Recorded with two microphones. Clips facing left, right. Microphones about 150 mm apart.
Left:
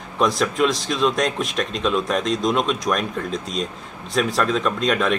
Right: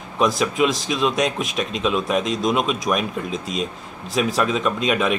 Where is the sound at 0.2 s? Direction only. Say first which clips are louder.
Even; centre (ahead or behind).